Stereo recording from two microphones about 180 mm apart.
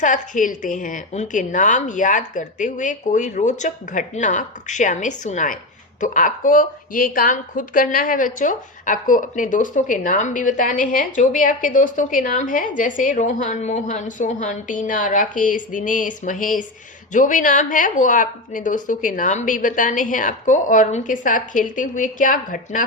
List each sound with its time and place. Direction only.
0.0 s a woman's voice: 45° left (ahead or behind)